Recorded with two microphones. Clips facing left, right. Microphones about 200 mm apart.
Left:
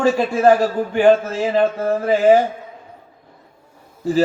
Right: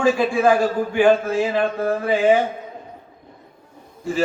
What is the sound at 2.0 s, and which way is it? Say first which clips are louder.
Speech: left 4 dB; 40° left (ahead or behind).